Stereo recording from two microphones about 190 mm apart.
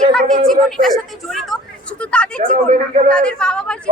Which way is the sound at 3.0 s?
5° left (ahead or behind).